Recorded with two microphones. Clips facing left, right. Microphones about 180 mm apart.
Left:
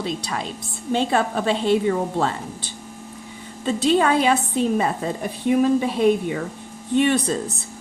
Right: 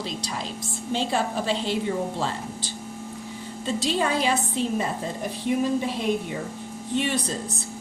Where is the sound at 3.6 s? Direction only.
55° left (ahead or behind).